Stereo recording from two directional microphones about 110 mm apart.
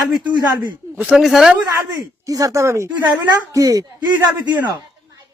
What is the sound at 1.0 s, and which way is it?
Speech, 10° right (ahead or behind).